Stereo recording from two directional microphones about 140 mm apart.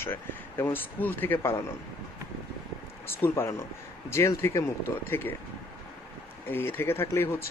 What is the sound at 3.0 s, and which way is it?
Speech, 20° left (ahead or behind).